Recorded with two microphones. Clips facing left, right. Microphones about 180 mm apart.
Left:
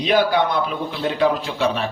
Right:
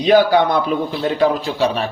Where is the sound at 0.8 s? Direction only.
40° right (ahead or behind).